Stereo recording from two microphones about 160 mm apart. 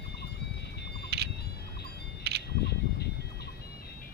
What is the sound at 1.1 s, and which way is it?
Vehicle, 90° right.